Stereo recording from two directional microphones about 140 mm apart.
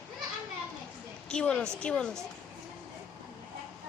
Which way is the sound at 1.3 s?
5° left (ahead or behind).